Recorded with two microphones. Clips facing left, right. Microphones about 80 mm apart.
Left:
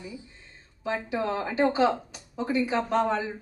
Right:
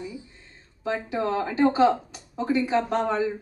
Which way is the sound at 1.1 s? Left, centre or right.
Right.